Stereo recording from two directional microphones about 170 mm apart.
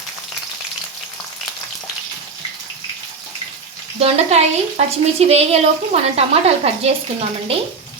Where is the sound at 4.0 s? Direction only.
40° right (ahead or behind).